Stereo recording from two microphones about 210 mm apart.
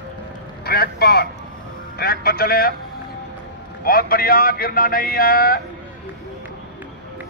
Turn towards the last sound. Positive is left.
turn(degrees=45)  # may be behind; listen again after turning